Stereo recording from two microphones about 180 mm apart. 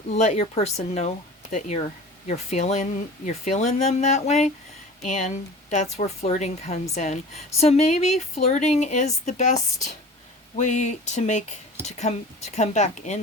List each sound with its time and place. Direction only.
0.1 s speech: 40° left (ahead or behind)